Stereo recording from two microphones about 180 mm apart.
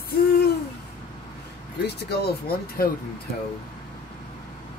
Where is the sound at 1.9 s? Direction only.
60° left (ahead or behind).